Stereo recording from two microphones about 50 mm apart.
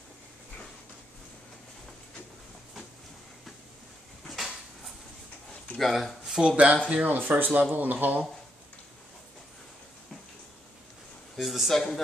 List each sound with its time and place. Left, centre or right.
4.3 s a sound: centre
5.8 s speech: centre
6.5 s speech: right
11.3 s speech: centre